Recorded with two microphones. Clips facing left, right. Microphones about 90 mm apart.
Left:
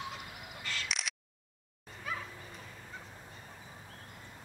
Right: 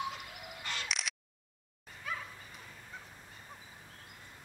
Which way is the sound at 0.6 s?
20° right (ahead or behind).